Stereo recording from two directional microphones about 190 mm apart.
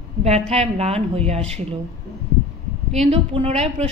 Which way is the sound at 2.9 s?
30° right (ahead or behind).